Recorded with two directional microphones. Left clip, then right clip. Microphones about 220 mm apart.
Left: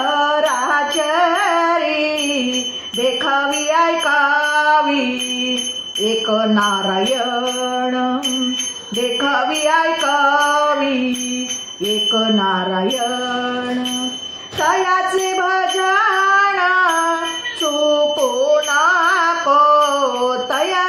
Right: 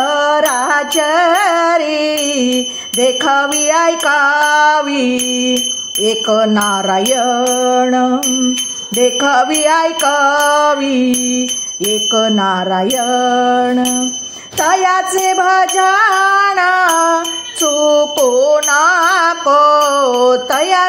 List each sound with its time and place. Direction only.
0.1 s music: 45° right (ahead or behind)
3.0 s music: 45° right (ahead or behind)
7.7 s a sound: 40° right (ahead or behind)
9.2 s music: 45° right (ahead or behind)
12.1 s music: 45° right (ahead or behind)
14.6 s music: 45° right (ahead or behind)
18.5 s music: 45° right (ahead or behind)